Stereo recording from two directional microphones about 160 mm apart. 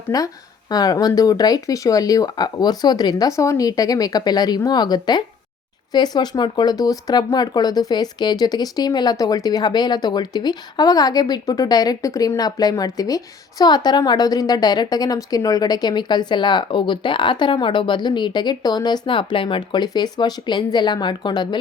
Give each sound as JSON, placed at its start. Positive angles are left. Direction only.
{"t": 0.1, "sound": "speech", "side_deg": 20}